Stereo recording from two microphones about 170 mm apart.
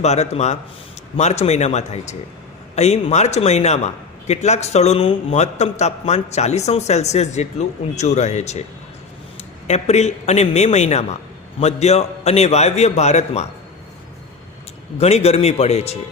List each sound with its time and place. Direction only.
0.0 s a man's voice: 40° left (ahead or behind)
14.9 s a man's voice: 35° left (ahead or behind)